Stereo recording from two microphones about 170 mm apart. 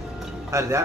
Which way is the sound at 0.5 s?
15° right (ahead or behind).